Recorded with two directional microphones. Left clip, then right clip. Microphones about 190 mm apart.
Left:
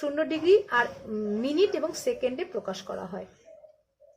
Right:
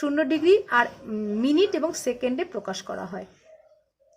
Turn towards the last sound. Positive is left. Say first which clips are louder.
# right 3 dB
turn(degrees=-35)  # may be behind; listen again after turning